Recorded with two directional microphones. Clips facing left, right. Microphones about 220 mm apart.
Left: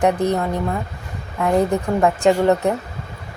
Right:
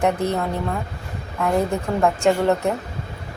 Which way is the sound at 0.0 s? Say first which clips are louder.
Left 3 dB; 15° left (ahead or behind).